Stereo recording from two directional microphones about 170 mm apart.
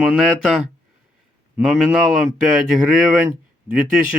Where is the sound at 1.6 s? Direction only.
5° right (ahead or behind).